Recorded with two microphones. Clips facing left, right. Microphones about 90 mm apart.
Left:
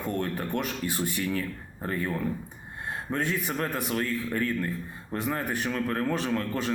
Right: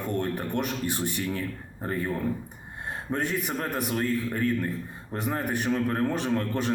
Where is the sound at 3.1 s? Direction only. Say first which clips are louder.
Right 1 dB; 20° right (ahead or behind).